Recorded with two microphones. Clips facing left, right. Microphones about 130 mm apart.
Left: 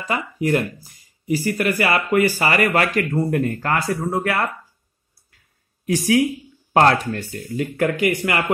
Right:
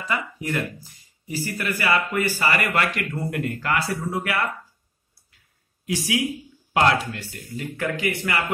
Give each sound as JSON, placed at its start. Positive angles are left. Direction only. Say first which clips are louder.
{"t": 0.0, "sound": "speech", "louder": "left 5 dB", "side_deg": 40}
{"t": 5.9, "sound": "speech", "louder": "left 7 dB", "side_deg": 50}